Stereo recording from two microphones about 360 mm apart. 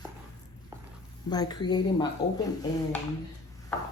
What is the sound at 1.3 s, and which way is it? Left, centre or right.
A woman's voice, centre.